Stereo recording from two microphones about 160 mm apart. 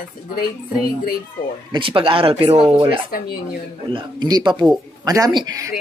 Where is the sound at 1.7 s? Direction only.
35° right (ahead or behind).